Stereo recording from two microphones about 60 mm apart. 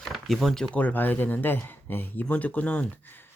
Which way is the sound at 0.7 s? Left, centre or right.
Left.